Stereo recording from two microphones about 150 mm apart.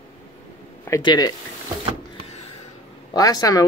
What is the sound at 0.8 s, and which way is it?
Speech, 25° left (ahead or behind).